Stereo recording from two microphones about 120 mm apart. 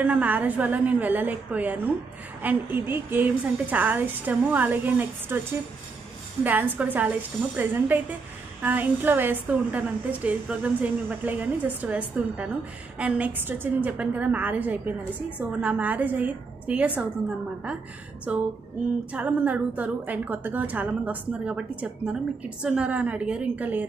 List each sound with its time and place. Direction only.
0.0 s a woman's voice: 10° right (ahead or behind)
6.4 s a woman's voice: 15° right (ahead or behind)
18.3 s a woman's voice: 10° right (ahead or behind)